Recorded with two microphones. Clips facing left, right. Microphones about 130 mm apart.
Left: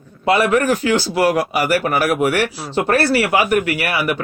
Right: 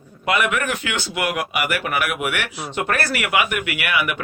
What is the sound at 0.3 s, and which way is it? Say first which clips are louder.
A man's voice: left 6 dB; 35° left (ahead or behind).